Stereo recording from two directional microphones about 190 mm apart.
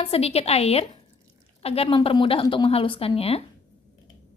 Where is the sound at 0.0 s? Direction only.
30° left (ahead or behind).